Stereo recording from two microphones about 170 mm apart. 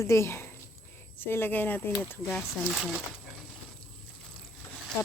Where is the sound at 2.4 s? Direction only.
5° right (ahead or behind).